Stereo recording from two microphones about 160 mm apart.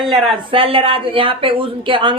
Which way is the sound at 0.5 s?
35° right (ahead or behind).